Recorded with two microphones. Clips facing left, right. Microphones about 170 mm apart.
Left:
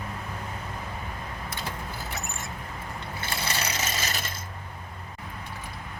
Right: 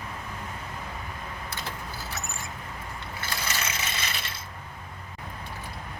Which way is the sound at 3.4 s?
35° left (ahead or behind).